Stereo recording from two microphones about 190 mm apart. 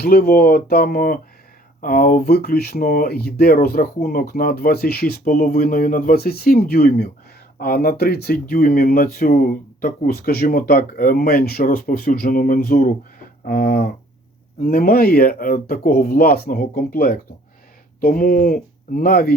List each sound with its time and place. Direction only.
0.0 s speech: 55° left (ahead or behind)